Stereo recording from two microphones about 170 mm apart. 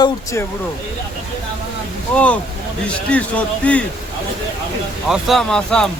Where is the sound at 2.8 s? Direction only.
5° left (ahead or behind).